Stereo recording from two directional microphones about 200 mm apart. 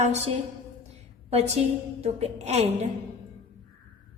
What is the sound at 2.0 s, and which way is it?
Speech, 35° right (ahead or behind).